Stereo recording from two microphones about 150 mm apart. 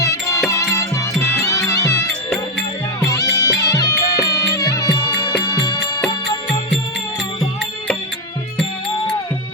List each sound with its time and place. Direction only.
0.0 s music: 20° left (ahead or behind)
3.0 s music: 25° left (ahead or behind)